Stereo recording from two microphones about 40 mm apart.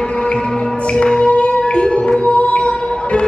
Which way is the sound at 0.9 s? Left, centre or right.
Left.